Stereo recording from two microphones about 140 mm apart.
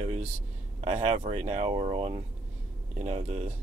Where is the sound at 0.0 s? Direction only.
50° right (ahead or behind).